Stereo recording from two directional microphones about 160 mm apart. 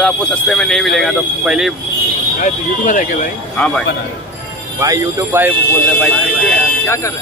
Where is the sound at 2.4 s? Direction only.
50° left (ahead or behind).